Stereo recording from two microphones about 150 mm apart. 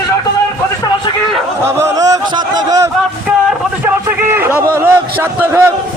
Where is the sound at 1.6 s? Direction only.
20° right (ahead or behind).